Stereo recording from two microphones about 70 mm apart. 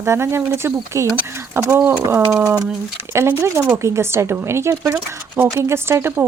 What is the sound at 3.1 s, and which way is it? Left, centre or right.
Speech, right.